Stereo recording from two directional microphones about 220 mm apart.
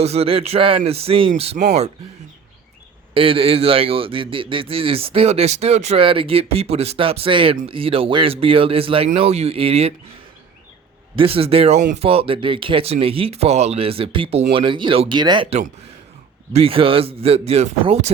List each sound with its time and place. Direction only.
0.0 s a man's voice: 30° right (ahead or behind)
3.2 s a man's voice: 25° right (ahead or behind)
11.1 s a man's voice: 25° right (ahead or behind)